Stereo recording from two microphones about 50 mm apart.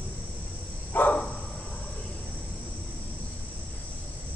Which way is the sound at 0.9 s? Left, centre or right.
Left.